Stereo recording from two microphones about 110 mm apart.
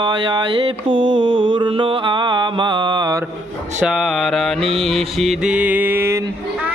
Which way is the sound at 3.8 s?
5° right (ahead or behind).